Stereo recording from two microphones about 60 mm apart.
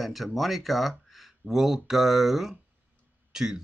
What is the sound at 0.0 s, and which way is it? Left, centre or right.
Speech, centre.